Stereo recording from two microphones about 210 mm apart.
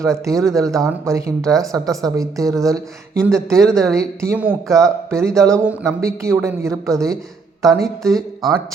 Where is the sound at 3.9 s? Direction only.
15° right (ahead or behind).